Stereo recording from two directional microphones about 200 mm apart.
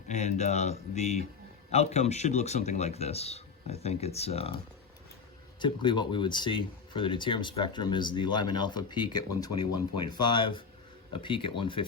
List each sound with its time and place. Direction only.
0.1 s speech: 35° left (ahead or behind)
5.5 s speech: 25° left (ahead or behind)